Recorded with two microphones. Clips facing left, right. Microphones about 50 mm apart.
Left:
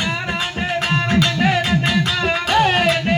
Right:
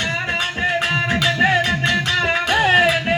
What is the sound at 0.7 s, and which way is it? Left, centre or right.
Music, centre.